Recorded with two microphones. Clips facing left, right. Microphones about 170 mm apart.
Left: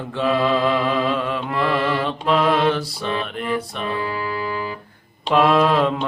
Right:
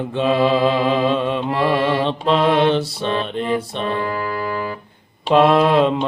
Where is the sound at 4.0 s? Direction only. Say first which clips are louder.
Right 2 dB; 45° right (ahead or behind).